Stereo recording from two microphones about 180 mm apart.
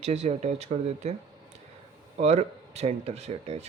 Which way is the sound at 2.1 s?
40° right (ahead or behind).